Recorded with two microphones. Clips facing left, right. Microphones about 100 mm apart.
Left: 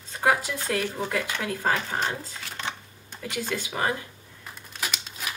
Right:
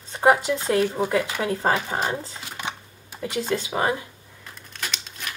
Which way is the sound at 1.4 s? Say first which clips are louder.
Right 4 dB; 25° right (ahead or behind).